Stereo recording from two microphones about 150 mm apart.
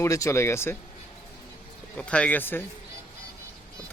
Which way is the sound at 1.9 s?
10° left (ahead or behind).